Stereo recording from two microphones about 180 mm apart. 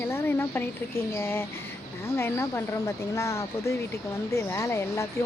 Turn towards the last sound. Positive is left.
turn(degrees=15)  # may be behind; listen again after turning